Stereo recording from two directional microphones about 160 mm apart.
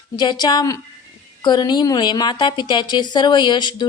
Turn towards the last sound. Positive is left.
turn(degrees=30)  # may be behind; listen again after turning